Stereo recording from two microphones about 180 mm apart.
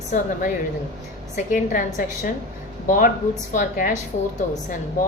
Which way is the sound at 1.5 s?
50° left (ahead or behind).